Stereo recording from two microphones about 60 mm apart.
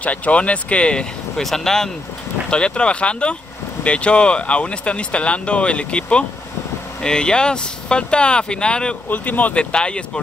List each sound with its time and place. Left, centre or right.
0.0 s speech: left
1.4 s speech: centre
9.1 s speech: left